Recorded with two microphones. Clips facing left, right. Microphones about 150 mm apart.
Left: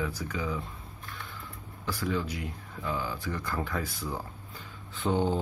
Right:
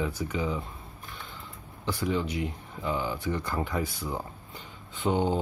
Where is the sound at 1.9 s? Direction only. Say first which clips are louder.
Right 2 dB; 20° right (ahead or behind).